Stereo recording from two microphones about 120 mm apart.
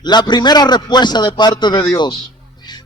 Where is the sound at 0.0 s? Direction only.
35° left (ahead or behind).